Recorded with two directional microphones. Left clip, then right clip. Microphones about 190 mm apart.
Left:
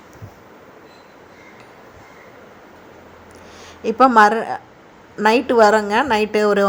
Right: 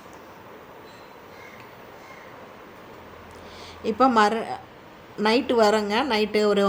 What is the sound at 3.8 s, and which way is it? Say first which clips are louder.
A woman's voice: left 7 dB; 20° left (ahead or behind).